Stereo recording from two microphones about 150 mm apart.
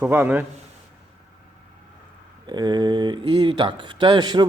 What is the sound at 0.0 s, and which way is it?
Speech, 10° right (ahead or behind).